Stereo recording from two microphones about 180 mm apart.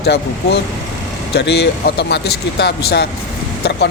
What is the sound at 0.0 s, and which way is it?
Speech, 65° left (ahead or behind).